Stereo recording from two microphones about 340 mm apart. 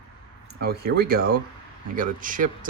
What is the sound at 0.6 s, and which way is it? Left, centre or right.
Speech, right.